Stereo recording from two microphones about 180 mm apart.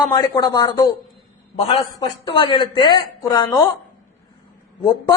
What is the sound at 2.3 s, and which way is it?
A man's voice, 30° left (ahead or behind).